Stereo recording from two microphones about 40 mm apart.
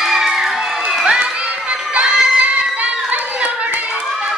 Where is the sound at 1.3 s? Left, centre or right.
Right.